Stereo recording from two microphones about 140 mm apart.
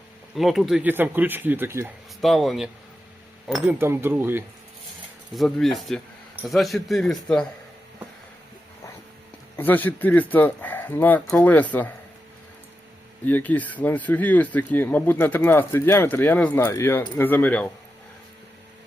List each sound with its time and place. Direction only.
0.3 s speech: centre (ahead or behind)
0.9 s speech: 15° right (ahead or behind)
2.2 s speech: centre (ahead or behind)
3.7 s speech: 15° right (ahead or behind)
5.3 s speech: centre (ahead or behind)
9.6 s speech: 15° left (ahead or behind)
13.2 s speech: 10° left (ahead or behind)